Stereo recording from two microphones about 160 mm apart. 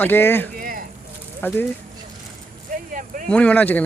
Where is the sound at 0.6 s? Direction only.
60° right (ahead or behind).